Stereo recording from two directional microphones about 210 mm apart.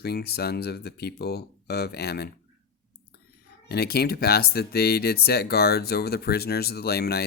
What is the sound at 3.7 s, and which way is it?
Speech, 50° left (ahead or behind).